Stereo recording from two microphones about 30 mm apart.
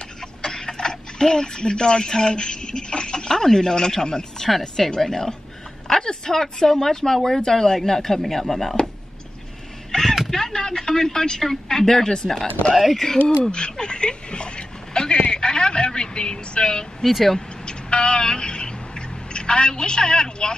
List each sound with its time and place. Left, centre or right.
0.4 s speech: left
3.3 s speech: centre
4.4 s speech: centre
4.9 s a woman's voice: centre
9.9 s a sound: left
10.3 s speech: centre
12.7 s speech: centre
13.5 s speech: left
15.0 s a sound: left
17.0 s speech: centre
17.6 s vehicle: left